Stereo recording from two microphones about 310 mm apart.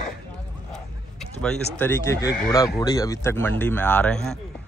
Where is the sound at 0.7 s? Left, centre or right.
Centre.